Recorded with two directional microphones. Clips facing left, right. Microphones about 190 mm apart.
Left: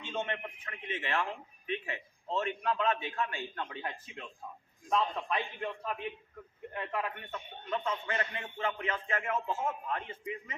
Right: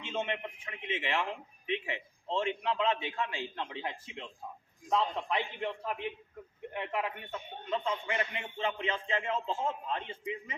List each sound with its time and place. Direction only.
0.0 s a man's voice: 20° right (ahead or behind)